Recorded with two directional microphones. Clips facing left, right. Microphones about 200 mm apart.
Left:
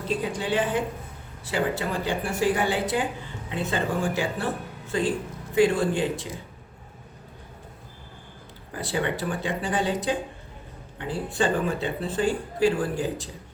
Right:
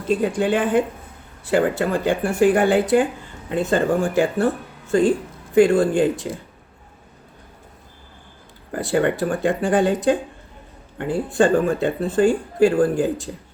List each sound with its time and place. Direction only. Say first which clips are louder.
0.2 s speech: right 6 dB; 50° right (ahead or behind)
8.7 s speech: right 8 dB; 50° right (ahead or behind)